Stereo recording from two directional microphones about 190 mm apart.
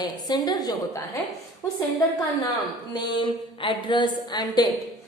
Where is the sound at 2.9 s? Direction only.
25° left (ahead or behind).